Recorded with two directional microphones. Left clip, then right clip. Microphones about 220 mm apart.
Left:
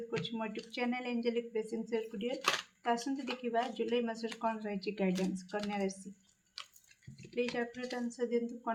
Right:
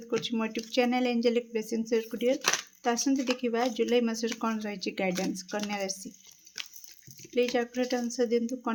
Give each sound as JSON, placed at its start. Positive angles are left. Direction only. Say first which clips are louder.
{"t": 0.3, "sound": "speech", "louder": "right 8 dB", "side_deg": -50}
{"t": 7.3, "sound": "speech", "louder": "right 9 dB", "side_deg": -50}